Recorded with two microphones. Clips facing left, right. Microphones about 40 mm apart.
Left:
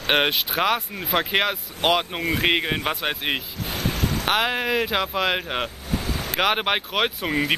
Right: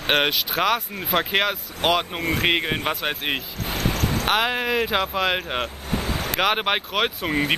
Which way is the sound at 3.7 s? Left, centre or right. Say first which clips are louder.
Right 1 dB; right.